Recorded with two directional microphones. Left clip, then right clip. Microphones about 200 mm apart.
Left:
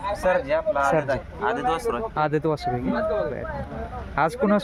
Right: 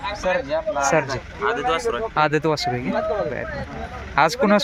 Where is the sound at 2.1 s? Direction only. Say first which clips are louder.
Right 6 dB; 5° left (ahead or behind).